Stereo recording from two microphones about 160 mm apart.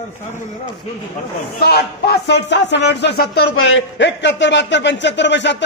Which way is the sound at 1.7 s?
90° left.